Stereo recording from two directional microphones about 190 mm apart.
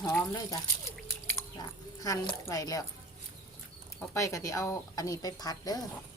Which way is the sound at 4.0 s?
15° left (ahead or behind).